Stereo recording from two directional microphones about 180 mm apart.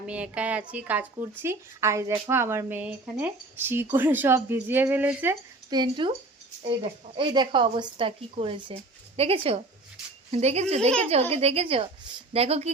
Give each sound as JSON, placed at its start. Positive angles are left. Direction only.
{"t": 0.0, "sound": "speech", "side_deg": -5}
{"t": 5.7, "sound": "speech", "side_deg": -25}
{"t": 7.2, "sound": "a woman's voice", "side_deg": -25}